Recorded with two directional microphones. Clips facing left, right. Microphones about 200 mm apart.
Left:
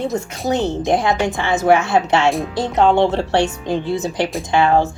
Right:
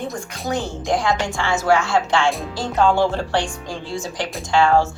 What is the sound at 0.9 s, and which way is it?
Speech, 20° left (ahead or behind).